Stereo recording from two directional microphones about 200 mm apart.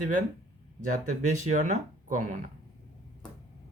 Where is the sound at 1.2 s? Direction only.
35° right (ahead or behind).